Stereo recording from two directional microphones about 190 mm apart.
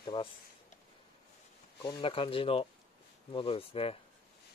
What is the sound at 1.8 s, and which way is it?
Speech, 25° left (ahead or behind).